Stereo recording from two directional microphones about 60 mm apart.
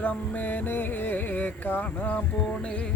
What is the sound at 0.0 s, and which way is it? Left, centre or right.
Music, left.